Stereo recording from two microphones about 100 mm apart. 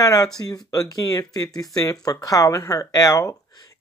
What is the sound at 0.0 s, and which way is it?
Speech, 40° left (ahead or behind).